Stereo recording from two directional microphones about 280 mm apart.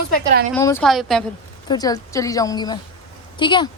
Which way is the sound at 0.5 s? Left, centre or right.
Centre.